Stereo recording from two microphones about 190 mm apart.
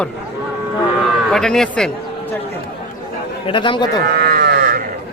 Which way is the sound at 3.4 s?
25° left (ahead or behind).